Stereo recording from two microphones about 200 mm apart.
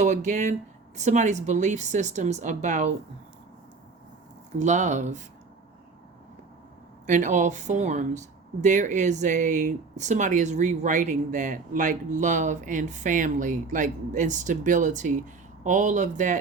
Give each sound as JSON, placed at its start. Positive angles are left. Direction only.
{"t": 0.0, "sound": "speech", "side_deg": -35}
{"t": 4.5, "sound": "speech", "side_deg": -35}
{"t": 7.1, "sound": "speech", "side_deg": -40}